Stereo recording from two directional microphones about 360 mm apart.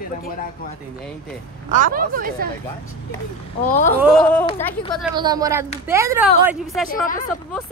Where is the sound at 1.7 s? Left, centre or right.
Right.